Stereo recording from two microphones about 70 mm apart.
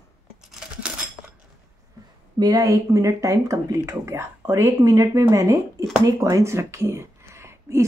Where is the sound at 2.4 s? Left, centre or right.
Right.